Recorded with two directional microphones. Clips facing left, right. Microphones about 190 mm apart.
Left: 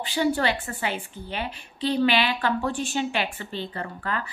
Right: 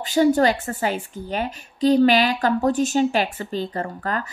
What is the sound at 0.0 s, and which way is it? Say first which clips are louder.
A woman's voice: right 7 dB; 45° right (ahead or behind).